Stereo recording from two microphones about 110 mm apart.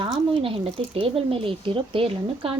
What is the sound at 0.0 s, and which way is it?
Speech, 55° right (ahead or behind).